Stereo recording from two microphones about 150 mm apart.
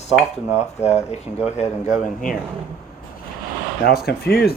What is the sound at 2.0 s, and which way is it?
Speech, 65° left (ahead or behind).